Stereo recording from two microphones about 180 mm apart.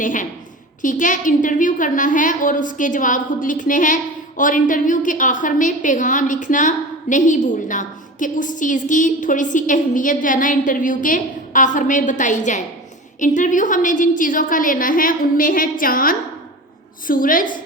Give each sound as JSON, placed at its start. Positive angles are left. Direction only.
{"t": 0.0, "sound": "a woman's voice", "side_deg": 45}